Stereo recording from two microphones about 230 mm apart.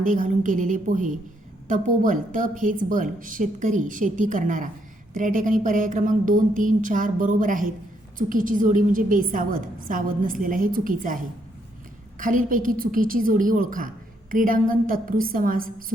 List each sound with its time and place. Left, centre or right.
0.0 s a woman's voice: right